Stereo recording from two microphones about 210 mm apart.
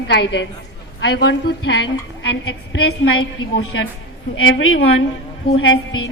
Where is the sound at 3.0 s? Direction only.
65° left (ahead or behind).